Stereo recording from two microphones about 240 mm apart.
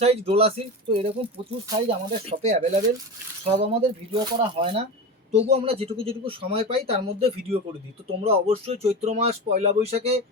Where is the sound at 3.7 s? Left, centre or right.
Right.